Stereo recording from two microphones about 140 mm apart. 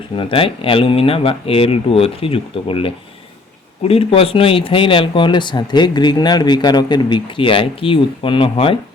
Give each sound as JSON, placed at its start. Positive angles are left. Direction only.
{"t": 0.2, "sound": "speech", "side_deg": 40}